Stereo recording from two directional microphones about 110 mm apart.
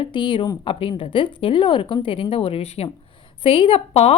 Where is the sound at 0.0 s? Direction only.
45° left (ahead or behind).